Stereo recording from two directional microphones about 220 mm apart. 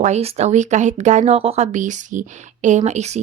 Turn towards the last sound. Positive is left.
turn(degrees=-30)  # may be behind; listen again after turning